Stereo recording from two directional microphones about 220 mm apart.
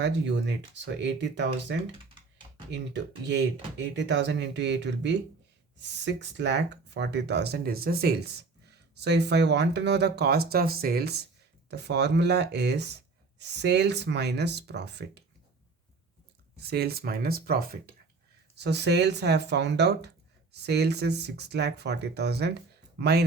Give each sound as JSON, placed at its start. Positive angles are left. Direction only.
{"t": 0.0, "sound": "speech", "side_deg": -50}
{"t": 16.6, "sound": "speech", "side_deg": -45}